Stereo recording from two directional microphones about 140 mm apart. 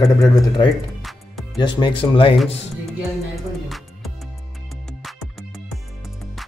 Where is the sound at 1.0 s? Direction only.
Centre (ahead or behind).